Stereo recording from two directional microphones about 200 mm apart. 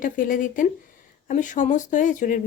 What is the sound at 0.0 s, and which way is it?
Speech, 40° left (ahead or behind).